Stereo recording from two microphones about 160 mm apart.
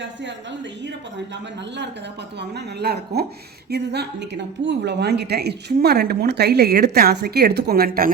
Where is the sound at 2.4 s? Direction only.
90° right; by 8.1 s 65° right (ahead or behind).